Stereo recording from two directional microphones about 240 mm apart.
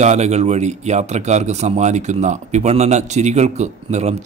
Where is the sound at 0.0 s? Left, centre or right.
Right.